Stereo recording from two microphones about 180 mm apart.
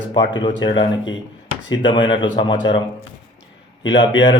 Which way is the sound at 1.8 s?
25° left (ahead or behind).